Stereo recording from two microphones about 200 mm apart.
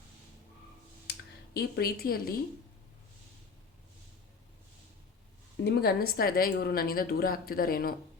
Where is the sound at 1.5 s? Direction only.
50° left (ahead or behind).